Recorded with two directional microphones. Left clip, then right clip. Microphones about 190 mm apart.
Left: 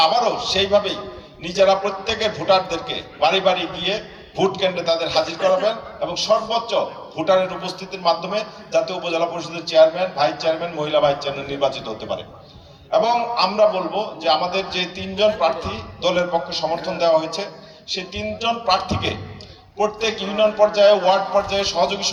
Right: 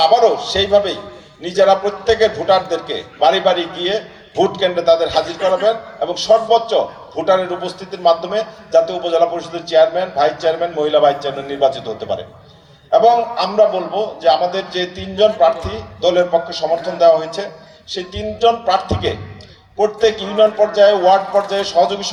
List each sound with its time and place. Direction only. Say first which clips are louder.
0.0 s a man's voice: right 5 dB; 45° left (ahead or behind)